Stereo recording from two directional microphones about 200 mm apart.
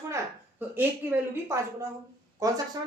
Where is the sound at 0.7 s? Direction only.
10° right (ahead or behind).